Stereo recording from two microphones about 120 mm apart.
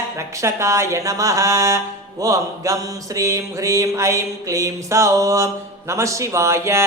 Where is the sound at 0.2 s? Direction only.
25° right (ahead or behind).